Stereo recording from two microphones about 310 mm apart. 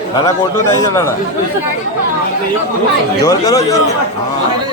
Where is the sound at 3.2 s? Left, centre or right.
Centre.